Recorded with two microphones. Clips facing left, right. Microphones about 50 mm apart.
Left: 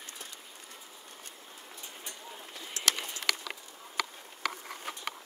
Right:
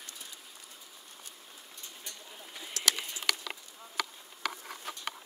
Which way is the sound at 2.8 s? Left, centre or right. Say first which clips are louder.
Even; left.